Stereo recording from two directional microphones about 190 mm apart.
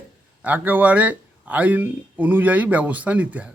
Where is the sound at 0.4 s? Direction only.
10° right (ahead or behind).